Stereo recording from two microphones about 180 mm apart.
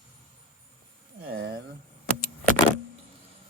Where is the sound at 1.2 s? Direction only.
65° right (ahead or behind).